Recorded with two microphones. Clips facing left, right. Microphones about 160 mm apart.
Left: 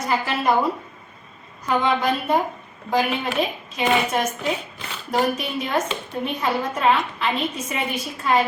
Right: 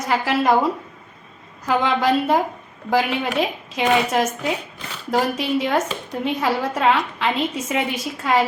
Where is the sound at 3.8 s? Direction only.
90° right.